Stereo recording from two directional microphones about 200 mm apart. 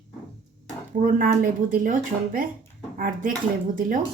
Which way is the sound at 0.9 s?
40° right (ahead or behind).